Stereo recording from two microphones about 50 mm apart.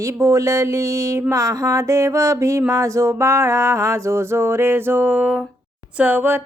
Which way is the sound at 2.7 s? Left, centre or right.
Right.